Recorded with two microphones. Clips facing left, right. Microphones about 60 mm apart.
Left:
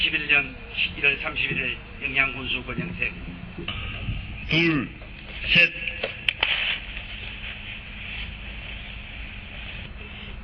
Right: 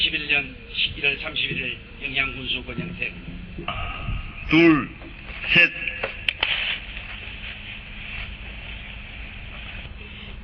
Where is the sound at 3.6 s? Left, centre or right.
Right.